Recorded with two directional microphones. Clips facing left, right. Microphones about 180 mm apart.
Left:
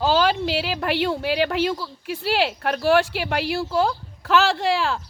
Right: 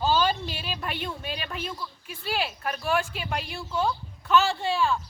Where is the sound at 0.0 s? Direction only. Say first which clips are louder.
Left 5 dB; 90° left.